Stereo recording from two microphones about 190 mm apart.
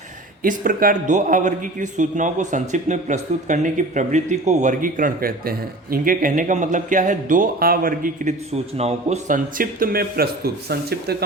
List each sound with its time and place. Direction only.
0.4 s a man's voice: 45° right (ahead or behind)